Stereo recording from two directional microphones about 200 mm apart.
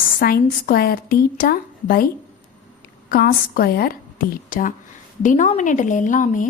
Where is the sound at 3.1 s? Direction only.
45° left (ahead or behind).